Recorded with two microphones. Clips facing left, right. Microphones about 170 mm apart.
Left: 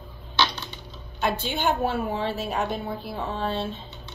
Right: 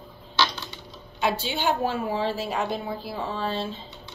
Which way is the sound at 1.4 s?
50° left (ahead or behind).